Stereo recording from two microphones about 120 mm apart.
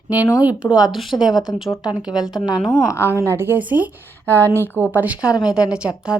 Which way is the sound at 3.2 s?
20° right (ahead or behind).